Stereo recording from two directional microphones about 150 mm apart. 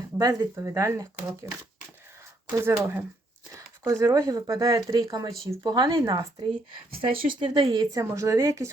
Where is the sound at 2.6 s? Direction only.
15° right (ahead or behind); by 6.1 s 35° right (ahead or behind).